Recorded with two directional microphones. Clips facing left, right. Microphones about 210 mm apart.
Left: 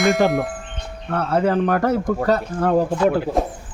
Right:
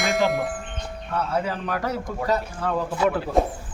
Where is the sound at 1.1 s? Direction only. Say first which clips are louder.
Left 7 dB; 55° left (ahead or behind).